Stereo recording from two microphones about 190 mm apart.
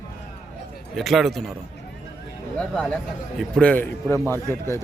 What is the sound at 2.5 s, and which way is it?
A man's voice, 5° left (ahead or behind).